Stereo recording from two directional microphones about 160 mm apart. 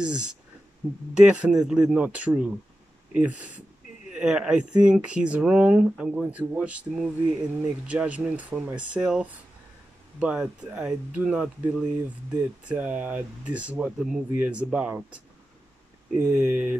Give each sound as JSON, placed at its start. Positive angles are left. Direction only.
{"t": 0.0, "sound": "speech", "side_deg": -5}